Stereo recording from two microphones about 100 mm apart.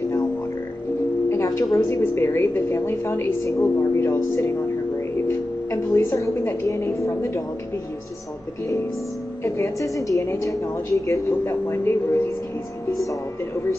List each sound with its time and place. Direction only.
1.3 s a woman's voice: 30° left (ahead or behind)
9.4 s a woman's voice: 30° left (ahead or behind)